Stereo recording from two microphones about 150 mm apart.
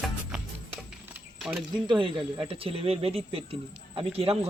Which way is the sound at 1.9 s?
30° right (ahead or behind).